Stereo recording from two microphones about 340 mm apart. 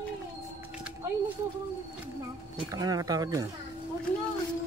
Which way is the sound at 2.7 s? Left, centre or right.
Centre.